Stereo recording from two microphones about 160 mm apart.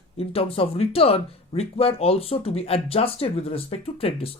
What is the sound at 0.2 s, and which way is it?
Speech, 35° left (ahead or behind).